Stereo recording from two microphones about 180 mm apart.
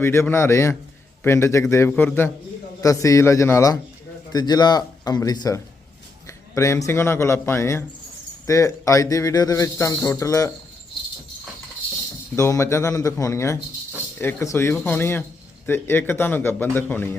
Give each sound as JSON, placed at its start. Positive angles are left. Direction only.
{"t": 0.0, "sound": "a man's voice", "side_deg": 15}
{"t": 12.4, "sound": "speech", "side_deg": 15}